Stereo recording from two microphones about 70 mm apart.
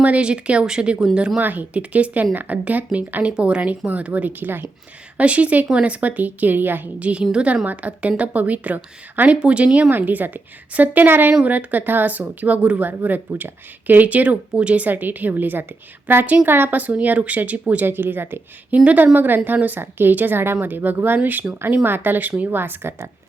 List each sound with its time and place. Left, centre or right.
0.0 s speech: centre
1.4 s speech: right
7.1 s speech: centre
9.4 s speech: centre
9.9 s speech: right